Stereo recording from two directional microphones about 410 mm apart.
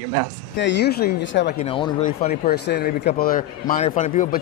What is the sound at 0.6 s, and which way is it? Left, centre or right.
Speech, left.